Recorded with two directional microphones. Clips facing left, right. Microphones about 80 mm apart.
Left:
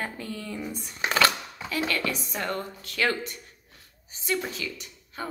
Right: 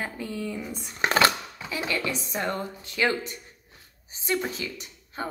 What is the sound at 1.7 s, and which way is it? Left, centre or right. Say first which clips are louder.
Speech: left 1 dB; centre.